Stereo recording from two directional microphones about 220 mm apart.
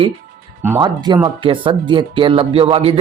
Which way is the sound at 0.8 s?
20° right (ahead or behind).